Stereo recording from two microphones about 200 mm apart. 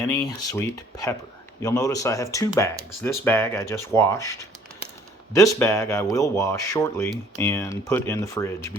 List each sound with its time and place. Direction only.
0.0 s speech: 15° left (ahead or behind)